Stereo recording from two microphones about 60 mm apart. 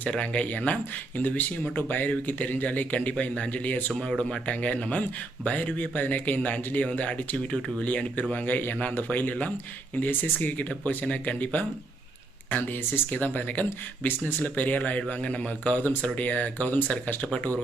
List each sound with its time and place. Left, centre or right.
0.0 s speech: left